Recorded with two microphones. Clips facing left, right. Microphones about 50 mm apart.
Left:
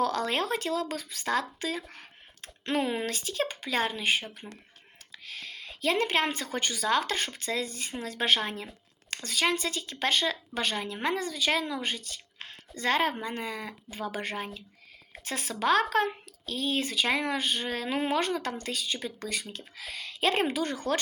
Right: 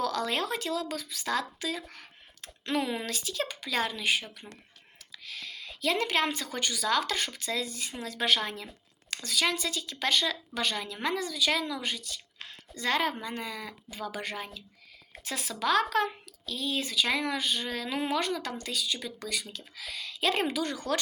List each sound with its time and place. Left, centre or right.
0.0 s speech: left
1.9 s a sound: left
3.0 s a woman's voice: left